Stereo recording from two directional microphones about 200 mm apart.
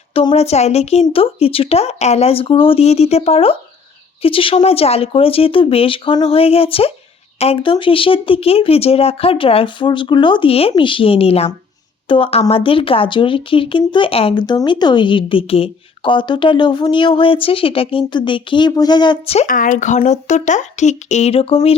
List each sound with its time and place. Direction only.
0.1 s speech: 30° left (ahead or behind)
19.5 s speech: 40° left (ahead or behind)